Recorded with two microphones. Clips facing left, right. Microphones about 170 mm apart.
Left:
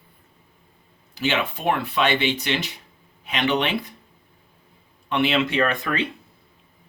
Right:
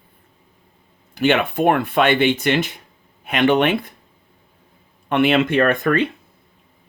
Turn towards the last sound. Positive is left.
turn(degrees=-50)  # may be behind; listen again after turning